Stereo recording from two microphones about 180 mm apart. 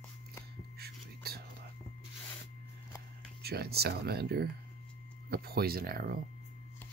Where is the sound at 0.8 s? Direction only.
60° right (ahead or behind).